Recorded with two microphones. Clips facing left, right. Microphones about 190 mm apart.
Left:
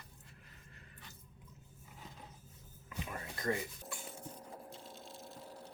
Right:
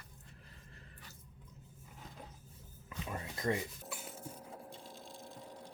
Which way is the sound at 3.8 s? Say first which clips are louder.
Right 1 dB; 5° right (ahead or behind).